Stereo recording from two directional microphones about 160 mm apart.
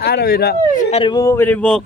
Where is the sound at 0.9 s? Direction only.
35° left (ahead or behind).